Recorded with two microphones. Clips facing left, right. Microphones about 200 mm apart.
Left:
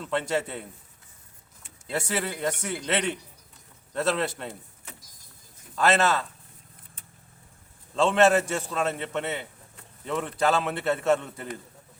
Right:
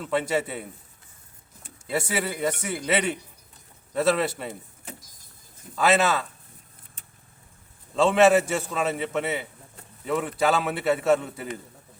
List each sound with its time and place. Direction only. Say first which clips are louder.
0.0 s a man's voice: right 2 dB; 5° right (ahead or behind)
1.9 s a man's voice: right 2 dB; 5° right (ahead or behind)
5.7 s a man's voice: right 1 dB; 5° right (ahead or behind)
7.9 s a man's voice: right 2 dB; 5° right (ahead or behind)